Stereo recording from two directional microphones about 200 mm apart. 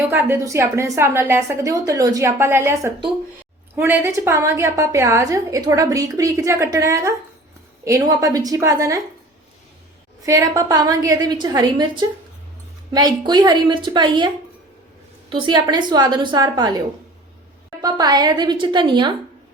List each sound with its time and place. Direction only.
0.1 s a woman's voice: 10° right (ahead or behind)
8.1 s a woman's voice: 15° right (ahead or behind)
10.2 s a woman's voice: 15° right (ahead or behind)
15.3 s a woman's voice: 25° right (ahead or behind)
17.8 s a woman's voice: 20° right (ahead or behind)